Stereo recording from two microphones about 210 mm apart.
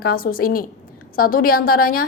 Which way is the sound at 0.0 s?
45° left (ahead or behind).